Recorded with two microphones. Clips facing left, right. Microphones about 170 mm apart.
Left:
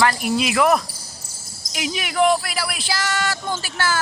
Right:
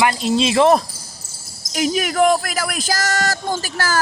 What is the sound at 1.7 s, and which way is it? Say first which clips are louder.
Speech: right 7 dB; 40° right (ahead or behind).